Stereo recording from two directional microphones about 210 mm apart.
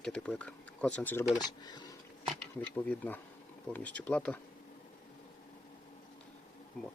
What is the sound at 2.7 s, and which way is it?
Speech, 5° left (ahead or behind).